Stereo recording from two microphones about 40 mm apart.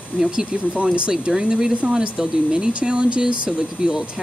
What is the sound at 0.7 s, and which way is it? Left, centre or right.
Speech, right.